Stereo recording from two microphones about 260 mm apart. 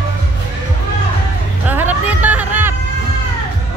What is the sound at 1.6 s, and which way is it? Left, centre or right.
Music, centre.